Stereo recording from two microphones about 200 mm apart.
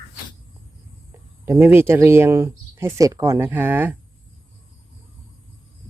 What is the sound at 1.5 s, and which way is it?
Speech, 10° right (ahead or behind).